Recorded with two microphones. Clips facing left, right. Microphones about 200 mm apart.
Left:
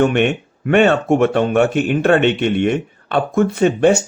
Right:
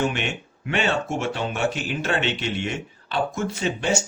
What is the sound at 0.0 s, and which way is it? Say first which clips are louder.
Speech: left 11 dB; 60° left (ahead or behind).